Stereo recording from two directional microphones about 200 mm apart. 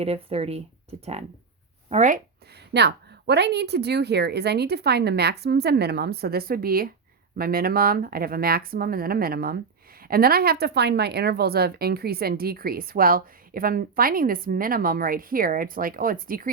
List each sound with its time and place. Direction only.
0.0 s speech: 30° right (ahead or behind)
2.7 s a woman's voice: 55° right (ahead or behind)